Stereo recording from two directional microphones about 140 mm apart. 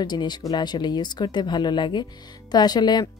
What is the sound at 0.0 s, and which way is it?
A woman's voice, 30° left (ahead or behind).